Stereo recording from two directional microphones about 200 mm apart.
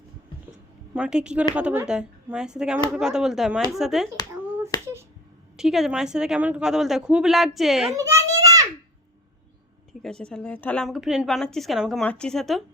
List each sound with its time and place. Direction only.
0.9 s a woman's voice: 5° right (ahead or behind)
5.5 s a woman's voice: centre (ahead or behind)
7.9 s a sound: 15° right (ahead or behind)
10.0 s a woman's voice: 5° left (ahead or behind)